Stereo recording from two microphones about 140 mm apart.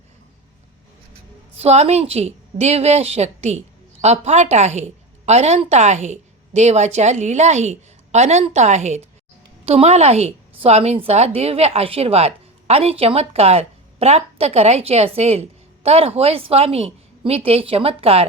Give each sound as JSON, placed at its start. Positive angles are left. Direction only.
{"t": 1.5, "sound": "a woman's voice", "side_deg": -50}